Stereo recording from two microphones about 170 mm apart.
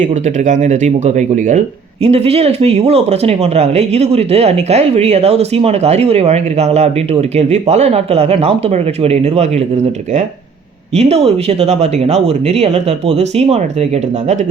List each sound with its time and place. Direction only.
0.0 s speech: 45° right (ahead or behind)
10.9 s speech: 35° right (ahead or behind)